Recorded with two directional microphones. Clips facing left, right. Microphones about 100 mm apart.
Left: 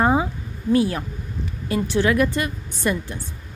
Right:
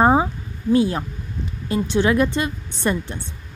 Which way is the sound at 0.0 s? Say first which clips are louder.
Right 3 dB; 30° right (ahead or behind).